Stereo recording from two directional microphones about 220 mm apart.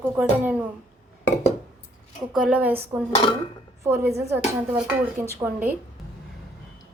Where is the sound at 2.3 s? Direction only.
5° right (ahead or behind).